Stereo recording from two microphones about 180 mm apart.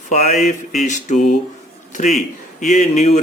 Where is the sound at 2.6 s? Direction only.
40° left (ahead or behind).